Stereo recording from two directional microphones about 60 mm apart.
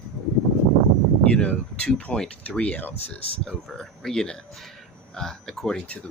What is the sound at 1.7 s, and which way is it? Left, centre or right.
Speech, centre.